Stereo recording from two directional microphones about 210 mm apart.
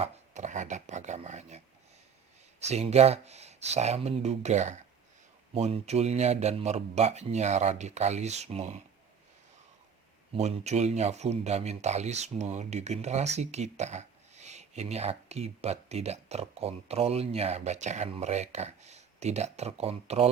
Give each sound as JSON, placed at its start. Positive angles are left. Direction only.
{"t": 0.0, "sound": "speech", "side_deg": -35}
{"t": 10.3, "sound": "speech", "side_deg": -30}